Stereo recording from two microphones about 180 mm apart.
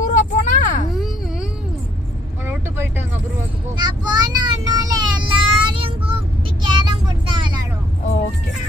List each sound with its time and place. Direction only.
0.0 s a sound: 45° left (ahead or behind)
2.4 s vehicle: 10° right (ahead or behind)
3.7 s child singing: 25° right (ahead or behind)
6.6 s vehicle: 25° right (ahead or behind)